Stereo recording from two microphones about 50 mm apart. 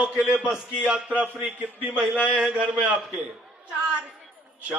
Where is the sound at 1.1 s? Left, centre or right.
Right.